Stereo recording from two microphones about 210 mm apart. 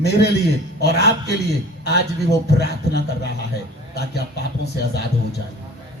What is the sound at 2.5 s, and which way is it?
Speech, 50° left (ahead or behind).